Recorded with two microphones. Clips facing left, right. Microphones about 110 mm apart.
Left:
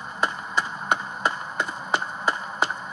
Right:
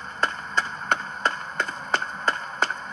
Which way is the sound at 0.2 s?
10° left (ahead or behind).